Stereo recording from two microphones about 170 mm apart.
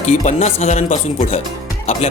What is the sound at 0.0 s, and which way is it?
Speech, 45° left (ahead or behind).